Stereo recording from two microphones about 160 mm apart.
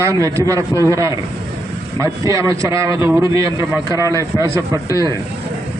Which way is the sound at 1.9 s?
20° right (ahead or behind).